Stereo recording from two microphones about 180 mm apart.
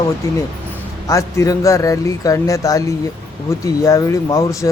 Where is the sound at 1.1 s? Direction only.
15° left (ahead or behind).